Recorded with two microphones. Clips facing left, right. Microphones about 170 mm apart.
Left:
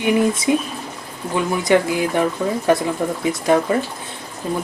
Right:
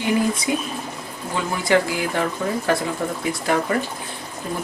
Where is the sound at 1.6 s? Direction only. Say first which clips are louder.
Left 2 dB; 20° left (ahead or behind).